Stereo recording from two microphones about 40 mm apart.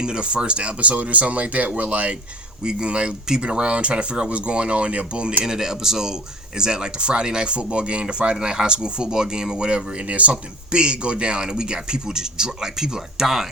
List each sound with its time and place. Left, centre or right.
0.0 s speech: right
2.6 s speech: right
5.4 s speech: centre; by 10.3 s right
10.7 s speech: right